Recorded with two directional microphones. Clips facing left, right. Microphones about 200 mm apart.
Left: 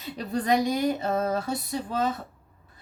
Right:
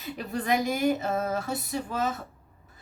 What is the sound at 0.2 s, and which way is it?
Speech, 35° left (ahead or behind).